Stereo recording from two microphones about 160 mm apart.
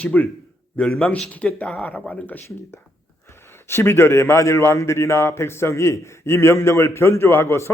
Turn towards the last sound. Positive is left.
turn(degrees=15)  # may be behind; listen again after turning